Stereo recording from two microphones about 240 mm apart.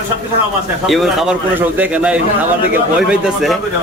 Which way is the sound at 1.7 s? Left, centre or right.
Centre.